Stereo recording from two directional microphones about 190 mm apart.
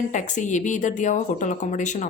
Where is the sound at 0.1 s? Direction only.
40° left (ahead or behind).